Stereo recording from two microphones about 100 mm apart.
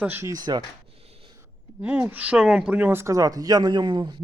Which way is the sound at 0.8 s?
80° right.